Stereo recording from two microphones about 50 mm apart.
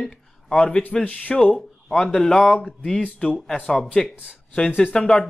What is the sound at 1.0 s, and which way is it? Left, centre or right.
Speech, left.